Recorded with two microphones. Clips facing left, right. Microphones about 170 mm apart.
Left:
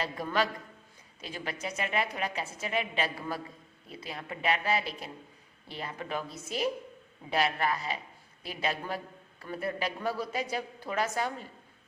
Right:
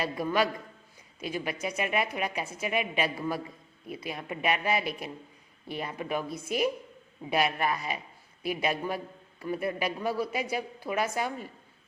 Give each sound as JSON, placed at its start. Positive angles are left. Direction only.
{"t": 0.0, "sound": "a woman's voice", "side_deg": -10}